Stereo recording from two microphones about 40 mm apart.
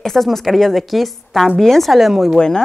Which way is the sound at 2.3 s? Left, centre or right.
Centre.